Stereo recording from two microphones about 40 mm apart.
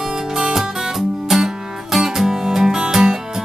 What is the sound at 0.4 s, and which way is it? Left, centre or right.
Music, centre.